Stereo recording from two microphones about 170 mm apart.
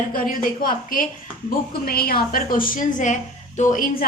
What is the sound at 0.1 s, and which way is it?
A woman's voice, 55° left (ahead or behind).